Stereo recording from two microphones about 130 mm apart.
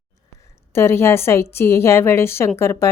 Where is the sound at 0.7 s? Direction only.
20° left (ahead or behind).